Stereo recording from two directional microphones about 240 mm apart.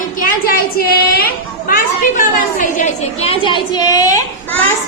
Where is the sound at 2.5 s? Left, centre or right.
Left.